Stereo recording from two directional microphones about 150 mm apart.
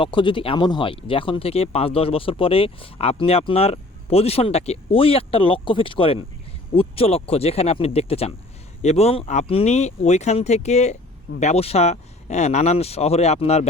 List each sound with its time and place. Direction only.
0.0 s speech: 35° left (ahead or behind)